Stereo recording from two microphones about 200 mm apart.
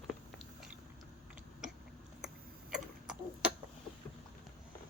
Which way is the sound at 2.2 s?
5° right (ahead or behind).